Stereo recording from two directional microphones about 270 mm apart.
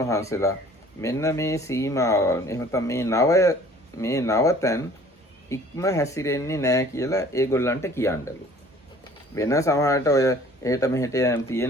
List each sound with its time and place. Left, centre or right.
0.0 s speech: centre
9.3 s speech: centre